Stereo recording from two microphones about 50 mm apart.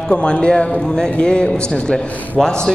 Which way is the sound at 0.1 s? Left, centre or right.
Left.